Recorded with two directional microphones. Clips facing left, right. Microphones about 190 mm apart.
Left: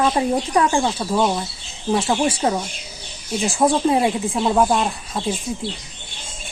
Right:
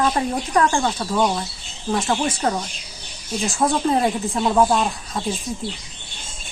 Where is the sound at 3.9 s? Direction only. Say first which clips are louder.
Left 1 dB; 5° left (ahead or behind).